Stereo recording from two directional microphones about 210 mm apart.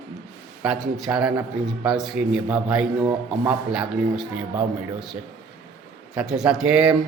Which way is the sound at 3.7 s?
5° right (ahead or behind).